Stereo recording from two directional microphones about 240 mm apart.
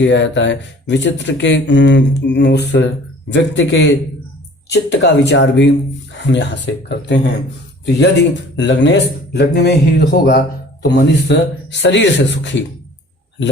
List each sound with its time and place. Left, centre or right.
0.0 s speech: left